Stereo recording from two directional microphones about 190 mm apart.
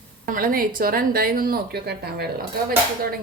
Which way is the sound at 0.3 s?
50° right (ahead or behind).